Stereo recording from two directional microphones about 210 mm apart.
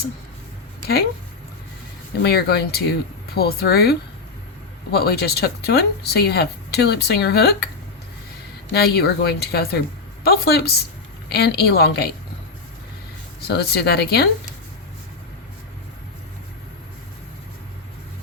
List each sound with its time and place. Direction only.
2.2 s speech: 50° left (ahead or behind)
8.7 s speech: 50° left (ahead or behind)
13.5 s speech: 50° left (ahead or behind)